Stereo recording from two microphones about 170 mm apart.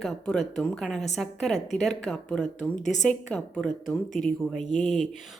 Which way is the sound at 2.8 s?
45° left (ahead or behind).